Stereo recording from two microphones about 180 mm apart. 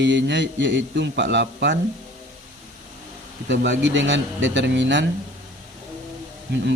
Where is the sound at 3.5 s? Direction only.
90° right.